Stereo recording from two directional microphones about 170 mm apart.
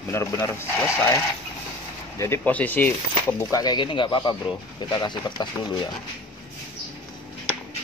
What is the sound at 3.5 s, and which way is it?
Speech, 25° left (ahead or behind).